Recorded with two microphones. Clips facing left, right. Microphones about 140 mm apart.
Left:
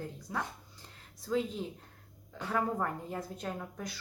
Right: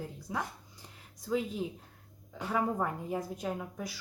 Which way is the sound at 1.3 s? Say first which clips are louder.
Even; 10° right (ahead or behind).